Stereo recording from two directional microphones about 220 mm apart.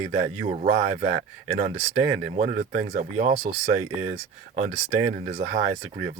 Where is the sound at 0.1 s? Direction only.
30° right (ahead or behind).